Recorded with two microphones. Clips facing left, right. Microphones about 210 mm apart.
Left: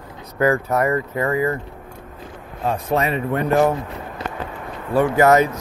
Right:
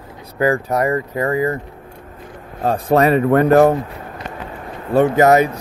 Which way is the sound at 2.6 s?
40° right (ahead or behind).